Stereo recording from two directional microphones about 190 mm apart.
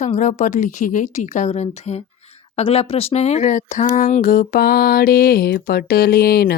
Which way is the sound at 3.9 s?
40° left (ahead or behind).